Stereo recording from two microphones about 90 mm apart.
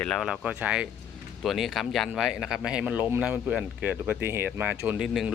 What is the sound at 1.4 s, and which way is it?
Speech, centre (ahead or behind).